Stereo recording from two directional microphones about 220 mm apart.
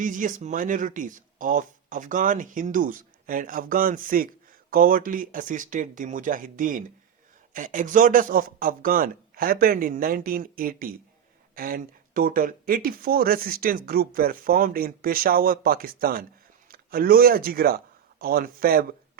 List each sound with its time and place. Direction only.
0.0 s speech: 35° right (ahead or behind)